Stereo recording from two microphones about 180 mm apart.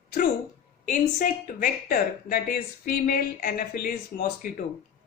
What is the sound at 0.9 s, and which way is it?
Speech, 50° left (ahead or behind).